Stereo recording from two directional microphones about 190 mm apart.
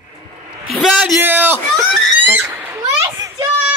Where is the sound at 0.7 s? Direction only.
Centre (ahead or behind).